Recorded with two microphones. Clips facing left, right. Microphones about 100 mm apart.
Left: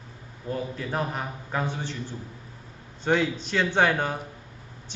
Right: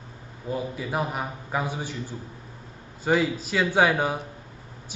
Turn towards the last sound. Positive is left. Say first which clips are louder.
# right 2 dB
turn(degrees=-10)  # may be behind; listen again after turning